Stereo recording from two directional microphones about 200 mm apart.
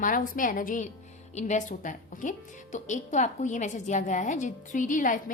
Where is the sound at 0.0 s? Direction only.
40° left (ahead or behind).